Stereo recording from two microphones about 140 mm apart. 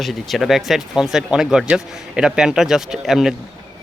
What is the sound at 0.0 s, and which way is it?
A man's voice, centre (ahead or behind).